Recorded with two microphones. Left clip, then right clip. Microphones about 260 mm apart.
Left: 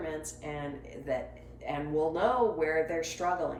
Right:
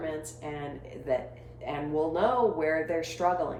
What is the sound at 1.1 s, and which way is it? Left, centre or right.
Speech, right.